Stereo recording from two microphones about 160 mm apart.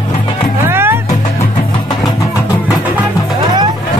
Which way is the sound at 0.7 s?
15° right (ahead or behind).